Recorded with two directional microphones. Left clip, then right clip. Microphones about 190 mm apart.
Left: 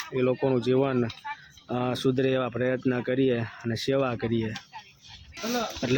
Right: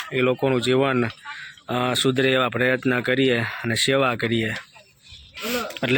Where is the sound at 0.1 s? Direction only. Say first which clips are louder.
Right 4 dB; 5° right (ahead or behind).